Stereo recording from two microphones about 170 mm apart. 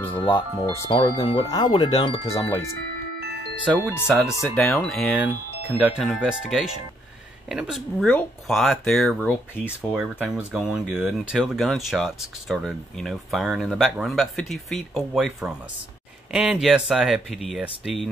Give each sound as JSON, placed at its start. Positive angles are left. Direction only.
{"t": 0.2, "sound": "speech", "side_deg": 25}
{"t": 3.6, "sound": "speech", "side_deg": -10}
{"t": 5.1, "sound": "speech", "side_deg": -10}